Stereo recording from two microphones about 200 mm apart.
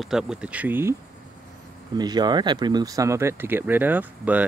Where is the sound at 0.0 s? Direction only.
5° right (ahead or behind).